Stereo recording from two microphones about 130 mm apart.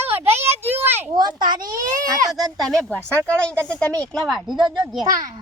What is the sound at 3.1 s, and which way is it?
Speech, 20° right (ahead or behind).